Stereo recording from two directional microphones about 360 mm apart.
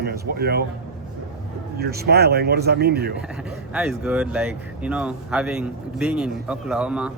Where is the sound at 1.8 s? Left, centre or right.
Right.